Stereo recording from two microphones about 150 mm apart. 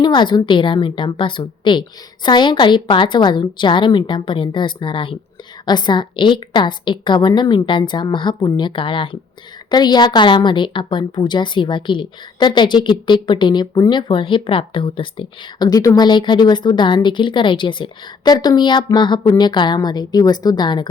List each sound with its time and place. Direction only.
0.0 s a woman's voice: 30° left (ahead or behind)